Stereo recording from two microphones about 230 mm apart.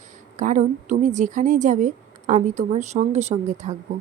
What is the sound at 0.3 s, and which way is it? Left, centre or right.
A woman's voice, right.